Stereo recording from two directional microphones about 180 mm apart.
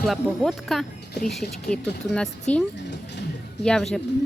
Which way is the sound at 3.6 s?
5° left (ahead or behind).